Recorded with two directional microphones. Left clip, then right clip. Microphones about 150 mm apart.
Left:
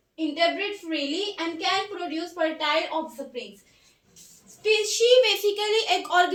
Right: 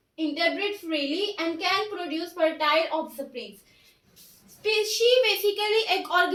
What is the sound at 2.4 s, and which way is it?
Speech, centre (ahead or behind).